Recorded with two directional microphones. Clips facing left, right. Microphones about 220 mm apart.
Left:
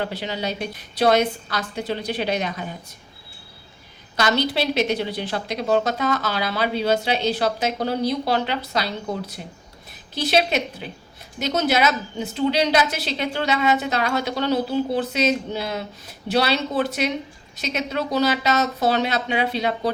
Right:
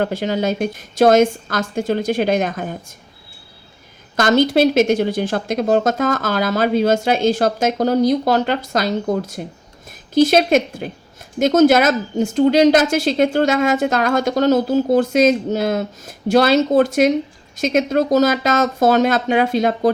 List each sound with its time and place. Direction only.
0.0 s a woman's voice: 45° right (ahead or behind)
4.2 s a woman's voice: 50° right (ahead or behind)